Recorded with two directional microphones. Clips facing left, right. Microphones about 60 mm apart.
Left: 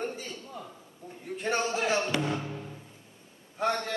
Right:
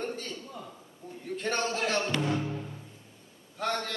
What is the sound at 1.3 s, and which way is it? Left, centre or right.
Speech, centre.